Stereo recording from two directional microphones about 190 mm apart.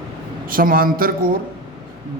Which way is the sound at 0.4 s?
50° right (ahead or behind).